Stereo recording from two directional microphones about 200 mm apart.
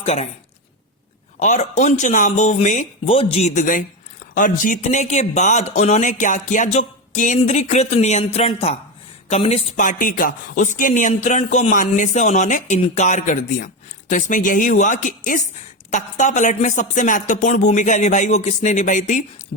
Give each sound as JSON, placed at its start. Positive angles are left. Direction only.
{"t": 0.0, "sound": "a woman's voice", "side_deg": 35}
{"t": 1.4, "sound": "speech", "side_deg": 35}